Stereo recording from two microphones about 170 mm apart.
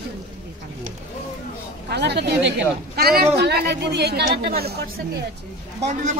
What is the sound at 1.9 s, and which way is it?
Speech, 80° right.